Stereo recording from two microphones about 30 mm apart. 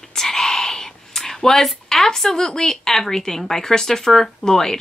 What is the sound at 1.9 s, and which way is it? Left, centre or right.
Speech, centre.